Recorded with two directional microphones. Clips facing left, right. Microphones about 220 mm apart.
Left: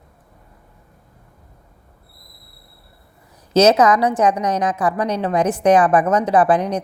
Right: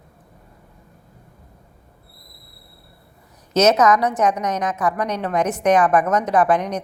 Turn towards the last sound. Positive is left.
turn(degrees=30)  # may be behind; listen again after turning